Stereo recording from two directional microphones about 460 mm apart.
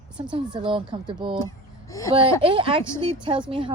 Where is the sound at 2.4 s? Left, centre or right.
Centre.